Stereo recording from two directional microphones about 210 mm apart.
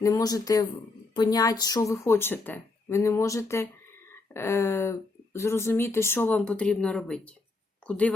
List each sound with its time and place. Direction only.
0.0 s speech: 15° left (ahead or behind)